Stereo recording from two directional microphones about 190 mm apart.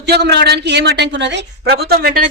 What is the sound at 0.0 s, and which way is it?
A woman's voice, 60° right (ahead or behind).